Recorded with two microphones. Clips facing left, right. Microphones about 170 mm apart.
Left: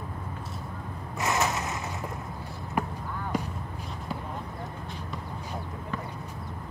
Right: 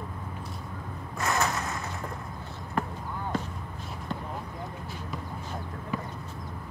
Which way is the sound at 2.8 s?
15° left (ahead or behind).